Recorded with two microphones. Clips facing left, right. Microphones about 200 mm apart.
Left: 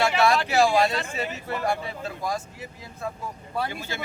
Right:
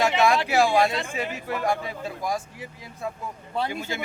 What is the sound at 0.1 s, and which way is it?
Speech, 20° right (ahead or behind).